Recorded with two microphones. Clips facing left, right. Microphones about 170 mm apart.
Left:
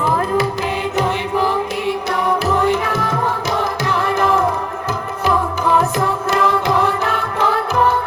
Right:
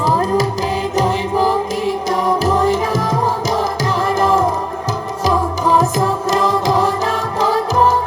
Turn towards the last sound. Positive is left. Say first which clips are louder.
# right 2 dB
turn(degrees=-35)  # may be behind; listen again after turning